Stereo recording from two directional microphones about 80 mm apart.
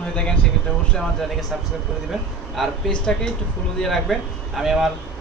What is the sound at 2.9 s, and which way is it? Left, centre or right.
Speech, centre.